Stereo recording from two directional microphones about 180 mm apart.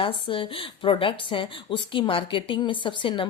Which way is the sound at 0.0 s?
30° left (ahead or behind).